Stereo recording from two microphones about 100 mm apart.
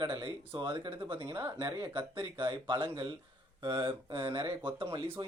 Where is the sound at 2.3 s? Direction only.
55° right (ahead or behind).